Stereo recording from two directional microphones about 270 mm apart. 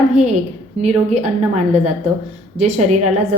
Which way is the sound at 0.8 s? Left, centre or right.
Right.